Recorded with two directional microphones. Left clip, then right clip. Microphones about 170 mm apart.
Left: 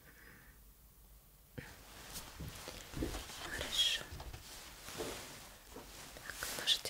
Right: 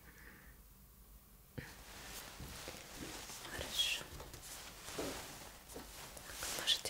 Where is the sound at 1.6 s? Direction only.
10° right (ahead or behind).